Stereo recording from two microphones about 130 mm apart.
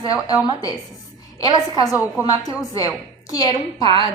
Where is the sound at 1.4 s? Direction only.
30° left (ahead or behind).